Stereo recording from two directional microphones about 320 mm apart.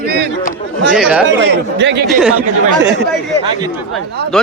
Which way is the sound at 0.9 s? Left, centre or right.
Centre.